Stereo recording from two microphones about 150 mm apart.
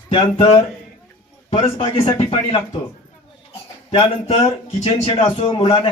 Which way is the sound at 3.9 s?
35° left (ahead or behind).